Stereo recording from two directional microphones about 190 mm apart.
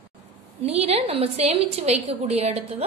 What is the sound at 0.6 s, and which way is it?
A woman's voice, 30° right (ahead or behind).